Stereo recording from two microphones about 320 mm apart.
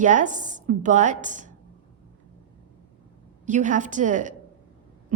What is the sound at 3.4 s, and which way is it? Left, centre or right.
Speech, right.